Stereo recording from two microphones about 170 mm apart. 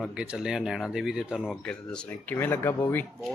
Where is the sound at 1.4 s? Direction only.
5° left (ahead or behind).